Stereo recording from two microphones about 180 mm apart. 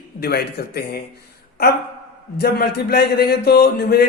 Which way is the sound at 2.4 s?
60° left (ahead or behind).